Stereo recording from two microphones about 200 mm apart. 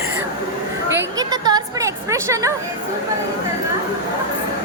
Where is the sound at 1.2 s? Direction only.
20° right (ahead or behind).